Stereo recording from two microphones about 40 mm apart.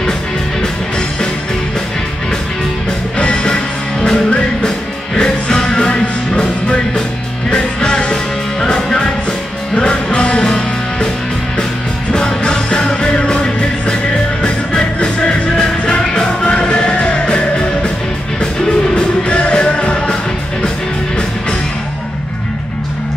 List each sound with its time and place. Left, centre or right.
0.6 s music: left
3.2 s music: left
7.4 s music: left
12.1 s music: left
18.9 s music: left